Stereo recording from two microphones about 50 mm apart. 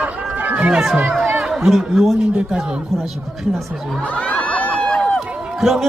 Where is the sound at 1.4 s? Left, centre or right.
Centre.